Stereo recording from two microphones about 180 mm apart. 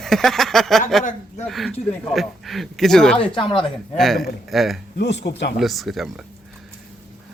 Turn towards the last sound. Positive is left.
turn(degrees=0)  # may be behind; listen again after turning